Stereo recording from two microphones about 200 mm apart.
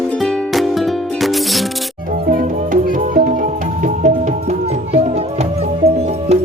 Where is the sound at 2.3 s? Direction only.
45° right (ahead or behind).